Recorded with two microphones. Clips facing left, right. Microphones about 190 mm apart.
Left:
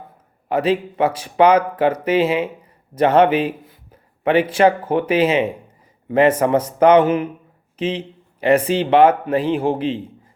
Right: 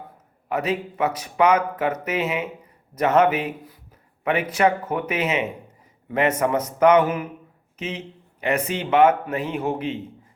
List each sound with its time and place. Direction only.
0.4 s speech: 30° left (ahead or behind)